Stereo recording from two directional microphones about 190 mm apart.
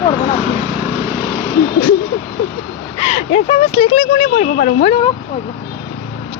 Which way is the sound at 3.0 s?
35° left (ahead or behind).